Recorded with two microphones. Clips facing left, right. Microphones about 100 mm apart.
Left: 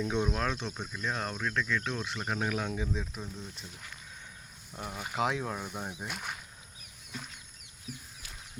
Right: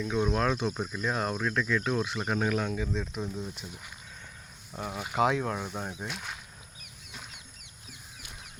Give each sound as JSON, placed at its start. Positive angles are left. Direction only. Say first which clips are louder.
{"t": 0.2, "sound": "speech", "louder": "right 4 dB", "side_deg": -5}
{"t": 3.2, "sound": "speech", "louder": "right 7 dB", "side_deg": -30}
{"t": 3.5, "sound": "speech", "louder": "right 3 dB", "side_deg": -5}